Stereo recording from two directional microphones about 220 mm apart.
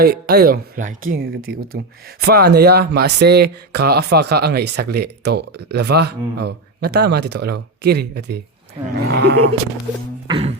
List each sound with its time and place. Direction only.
0.0 s speech: 45° right (ahead or behind)
10.2 s music: 25° right (ahead or behind)